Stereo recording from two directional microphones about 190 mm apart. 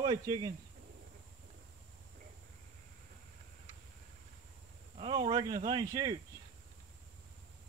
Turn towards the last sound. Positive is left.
turn(degrees=-20)  # may be behind; listen again after turning